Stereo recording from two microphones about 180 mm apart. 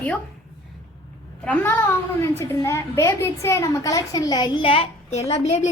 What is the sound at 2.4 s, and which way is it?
A child's voice, 15° left (ahead or behind).